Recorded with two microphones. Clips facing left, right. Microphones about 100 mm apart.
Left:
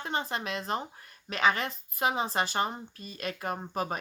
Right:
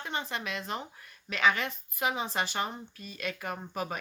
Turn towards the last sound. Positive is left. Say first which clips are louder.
# left 3 dB
turn(degrees=35)  # may be behind; listen again after turning